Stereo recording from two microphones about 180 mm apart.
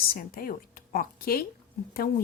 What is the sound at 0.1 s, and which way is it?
A woman's voice, 55° left (ahead or behind).